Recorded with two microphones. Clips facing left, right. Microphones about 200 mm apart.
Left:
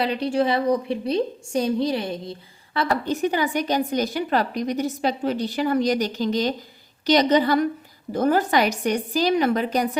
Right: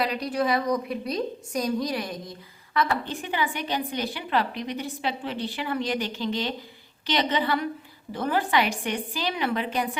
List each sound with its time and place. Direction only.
0.0 s a woman's voice: 30° left (ahead or behind)
2.7 s a woman's voice: 40° left (ahead or behind)